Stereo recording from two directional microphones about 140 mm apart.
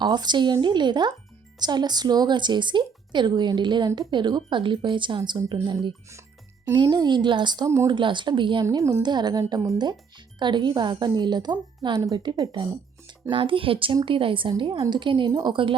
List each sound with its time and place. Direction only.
0.0 s a woman's voice: 30° right (ahead or behind)
6.8 s a woman's voice: 30° right (ahead or behind)
8.6 s a woman's voice: 25° right (ahead or behind)